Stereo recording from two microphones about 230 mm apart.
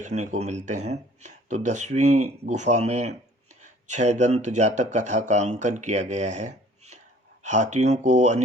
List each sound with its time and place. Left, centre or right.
0.0 s speech: right